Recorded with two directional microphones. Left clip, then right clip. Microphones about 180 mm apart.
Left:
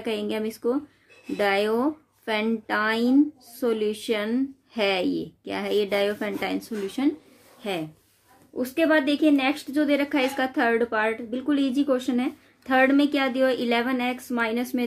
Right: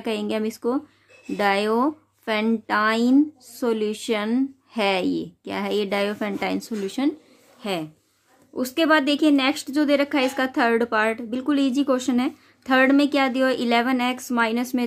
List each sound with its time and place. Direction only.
0.0 s a woman's voice: 35° right (ahead or behind)